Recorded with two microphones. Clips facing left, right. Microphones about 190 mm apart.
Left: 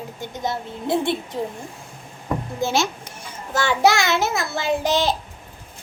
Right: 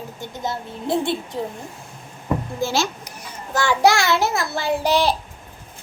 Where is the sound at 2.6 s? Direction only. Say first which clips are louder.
Left 4 dB; 20° left (ahead or behind).